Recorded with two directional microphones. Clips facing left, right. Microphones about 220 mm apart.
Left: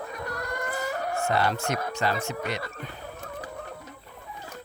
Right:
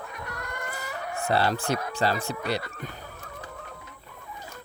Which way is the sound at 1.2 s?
30° right (ahead or behind).